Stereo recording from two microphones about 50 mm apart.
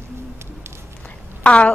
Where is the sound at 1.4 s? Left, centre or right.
Left.